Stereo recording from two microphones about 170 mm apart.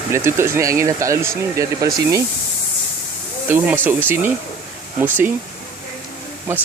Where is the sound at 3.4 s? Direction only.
10° right (ahead or behind).